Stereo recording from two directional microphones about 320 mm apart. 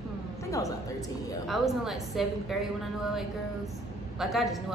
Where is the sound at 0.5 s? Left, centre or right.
Centre.